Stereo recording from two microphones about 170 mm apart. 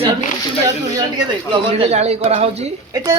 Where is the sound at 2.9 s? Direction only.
20° right (ahead or behind).